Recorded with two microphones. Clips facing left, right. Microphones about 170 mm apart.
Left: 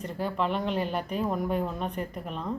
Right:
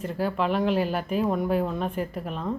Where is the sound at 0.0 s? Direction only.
5° right (ahead or behind).